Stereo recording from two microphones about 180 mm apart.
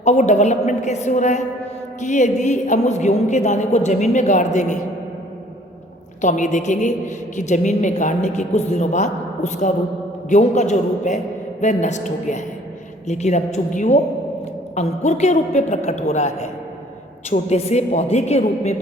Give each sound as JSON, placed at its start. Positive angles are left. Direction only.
{"t": 0.0, "sound": "a woman's voice", "side_deg": 40}
{"t": 6.2, "sound": "a woman's voice", "side_deg": 45}